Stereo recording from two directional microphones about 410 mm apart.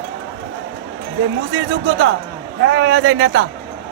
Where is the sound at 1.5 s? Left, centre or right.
Right.